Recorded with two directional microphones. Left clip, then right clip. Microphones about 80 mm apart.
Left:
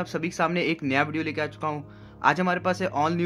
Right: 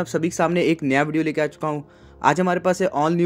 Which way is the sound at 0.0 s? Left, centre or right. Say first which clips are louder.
Right 5 dB; right.